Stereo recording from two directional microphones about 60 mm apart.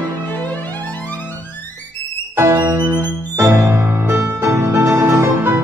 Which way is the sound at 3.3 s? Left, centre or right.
Right.